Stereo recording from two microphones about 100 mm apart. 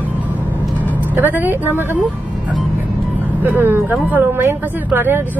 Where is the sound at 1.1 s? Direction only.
20° right (ahead or behind).